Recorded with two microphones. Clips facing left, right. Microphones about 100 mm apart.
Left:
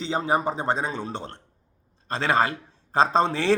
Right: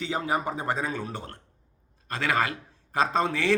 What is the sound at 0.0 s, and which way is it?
A man's voice, 30° left (ahead or behind).